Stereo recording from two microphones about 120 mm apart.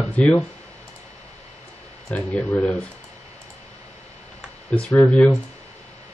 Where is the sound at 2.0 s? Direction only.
15° left (ahead or behind).